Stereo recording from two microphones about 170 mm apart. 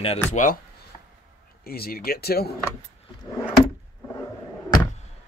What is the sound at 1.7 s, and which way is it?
Speech, 65° left (ahead or behind).